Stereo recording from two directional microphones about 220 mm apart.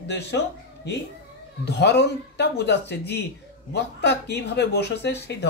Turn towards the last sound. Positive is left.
turn(degrees=50)  # may be behind; listen again after turning